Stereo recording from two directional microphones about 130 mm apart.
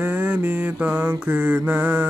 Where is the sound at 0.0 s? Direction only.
10° right (ahead or behind).